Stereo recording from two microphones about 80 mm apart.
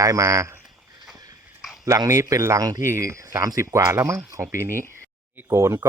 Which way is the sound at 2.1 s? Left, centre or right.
Right.